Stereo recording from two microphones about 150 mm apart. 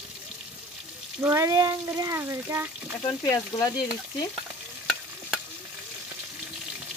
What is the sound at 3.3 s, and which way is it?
Frying, 25° left (ahead or behind).